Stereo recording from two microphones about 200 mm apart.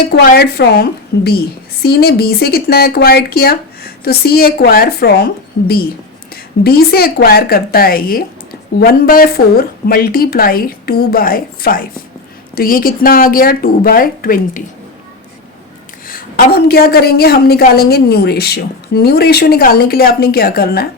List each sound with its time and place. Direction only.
0.0 s a woman's voice: 50° left (ahead or behind)
16.0 s a woman's voice: 50° left (ahead or behind)